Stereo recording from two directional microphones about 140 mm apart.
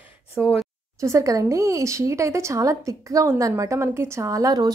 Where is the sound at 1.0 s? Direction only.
20° right (ahead or behind).